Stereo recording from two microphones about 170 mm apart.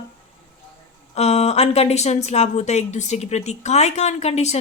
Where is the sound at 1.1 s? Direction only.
40° left (ahead or behind).